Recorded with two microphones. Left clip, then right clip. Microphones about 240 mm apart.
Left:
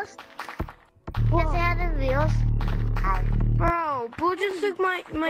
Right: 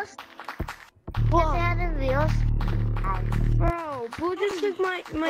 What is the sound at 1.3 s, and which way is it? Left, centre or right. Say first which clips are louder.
Music: right 1 dB; centre.